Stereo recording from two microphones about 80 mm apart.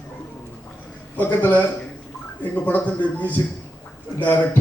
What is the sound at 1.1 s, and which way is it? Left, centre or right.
Speech, left.